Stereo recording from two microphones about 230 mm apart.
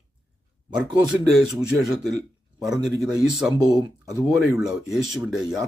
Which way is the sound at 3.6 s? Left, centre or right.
Centre.